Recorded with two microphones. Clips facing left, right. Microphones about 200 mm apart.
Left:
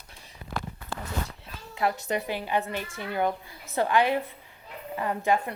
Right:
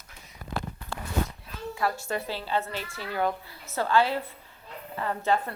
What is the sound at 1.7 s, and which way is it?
A woman's voice, 20° left (ahead or behind).